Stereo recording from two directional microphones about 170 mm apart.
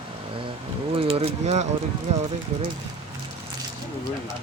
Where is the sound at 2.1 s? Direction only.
40° right (ahead or behind).